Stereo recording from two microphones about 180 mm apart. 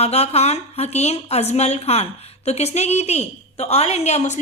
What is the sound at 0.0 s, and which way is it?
A woman's voice, 35° left (ahead or behind).